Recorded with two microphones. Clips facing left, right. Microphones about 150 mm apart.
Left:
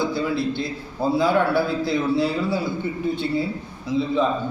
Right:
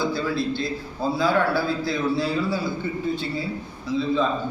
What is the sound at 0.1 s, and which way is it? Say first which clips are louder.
A man's voice: left 1 dB; 20° left (ahead or behind).